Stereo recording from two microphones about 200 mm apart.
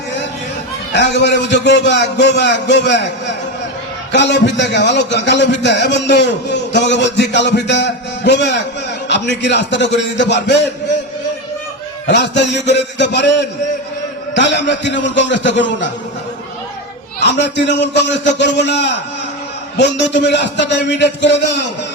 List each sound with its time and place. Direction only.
0.9 s a man's voice: 60° left (ahead or behind)
12.0 s a man's voice: 55° left (ahead or behind)
17.2 s a man's voice: 60° left (ahead or behind)